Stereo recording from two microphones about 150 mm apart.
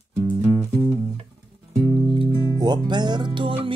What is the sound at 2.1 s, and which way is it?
Music, 30° right (ahead or behind).